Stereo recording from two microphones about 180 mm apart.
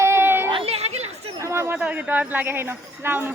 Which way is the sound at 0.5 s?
35° right (ahead or behind).